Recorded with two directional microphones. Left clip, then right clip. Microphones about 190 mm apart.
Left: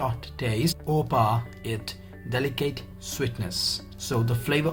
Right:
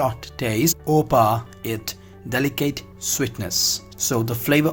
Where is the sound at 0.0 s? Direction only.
45° right (ahead or behind).